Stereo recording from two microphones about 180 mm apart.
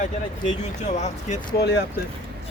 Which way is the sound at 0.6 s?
40° left (ahead or behind).